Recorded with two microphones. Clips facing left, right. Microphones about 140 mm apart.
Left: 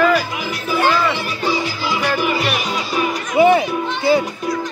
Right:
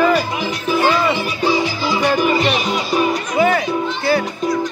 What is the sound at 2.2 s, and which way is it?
Music, 5° left (ahead or behind).